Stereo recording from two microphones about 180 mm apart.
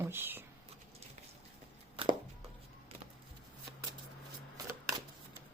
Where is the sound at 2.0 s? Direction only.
30° right (ahead or behind).